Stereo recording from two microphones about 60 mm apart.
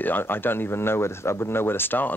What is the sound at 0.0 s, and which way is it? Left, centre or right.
Speech, left.